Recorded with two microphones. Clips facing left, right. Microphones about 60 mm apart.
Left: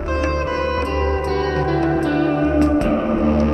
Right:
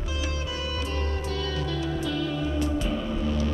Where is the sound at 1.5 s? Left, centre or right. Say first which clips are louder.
Left 12 dB; left.